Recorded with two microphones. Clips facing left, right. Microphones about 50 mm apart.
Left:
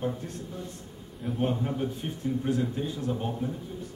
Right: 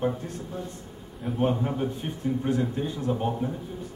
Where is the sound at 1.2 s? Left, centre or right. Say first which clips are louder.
Right 3 dB; centre.